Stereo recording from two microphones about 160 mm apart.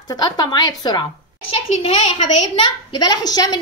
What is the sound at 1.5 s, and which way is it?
A child's voice, 40° left (ahead or behind).